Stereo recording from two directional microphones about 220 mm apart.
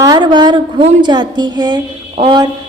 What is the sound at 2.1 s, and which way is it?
Speech, 20° right (ahead or behind).